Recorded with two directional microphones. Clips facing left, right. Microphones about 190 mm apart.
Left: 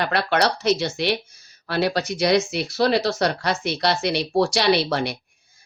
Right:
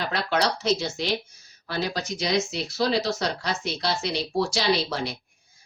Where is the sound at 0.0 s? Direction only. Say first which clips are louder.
Left 4 dB; 65° left (ahead or behind).